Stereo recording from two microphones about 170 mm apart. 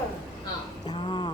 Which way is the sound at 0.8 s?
25° left (ahead or behind).